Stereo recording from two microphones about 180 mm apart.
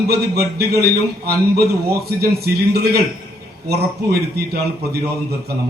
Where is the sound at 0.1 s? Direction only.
60° right (ahead or behind).